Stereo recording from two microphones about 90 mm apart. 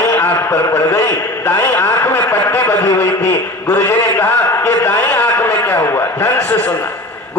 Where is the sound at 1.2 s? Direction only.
25° left (ahead or behind).